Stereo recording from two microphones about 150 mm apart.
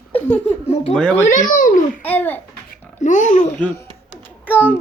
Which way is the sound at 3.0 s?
55° left (ahead or behind).